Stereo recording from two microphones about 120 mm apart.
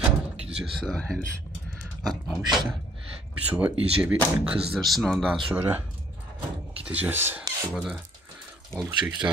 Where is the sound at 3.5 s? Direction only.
15° right (ahead or behind).